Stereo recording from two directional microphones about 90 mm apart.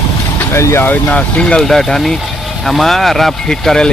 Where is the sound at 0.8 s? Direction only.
15° left (ahead or behind).